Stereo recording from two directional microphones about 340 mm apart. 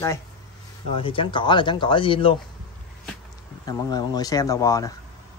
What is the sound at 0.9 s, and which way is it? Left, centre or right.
Speech, centre.